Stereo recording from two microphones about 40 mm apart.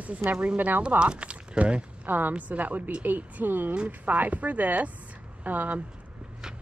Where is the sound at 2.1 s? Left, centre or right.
Right.